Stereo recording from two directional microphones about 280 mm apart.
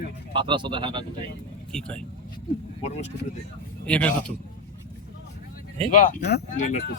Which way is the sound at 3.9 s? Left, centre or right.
Centre.